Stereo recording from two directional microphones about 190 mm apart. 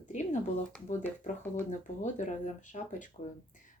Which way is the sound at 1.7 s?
40° left (ahead or behind).